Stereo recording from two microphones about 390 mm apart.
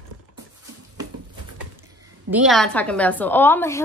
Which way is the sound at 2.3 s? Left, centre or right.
Centre.